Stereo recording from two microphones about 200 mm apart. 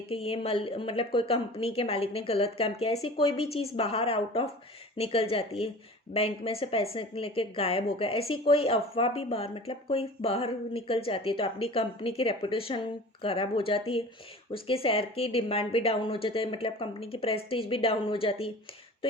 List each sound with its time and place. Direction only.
0.1 s speech: 30° left (ahead or behind)